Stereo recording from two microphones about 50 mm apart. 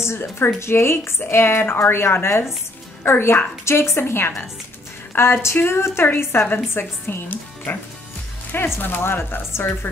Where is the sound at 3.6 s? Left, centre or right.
Left.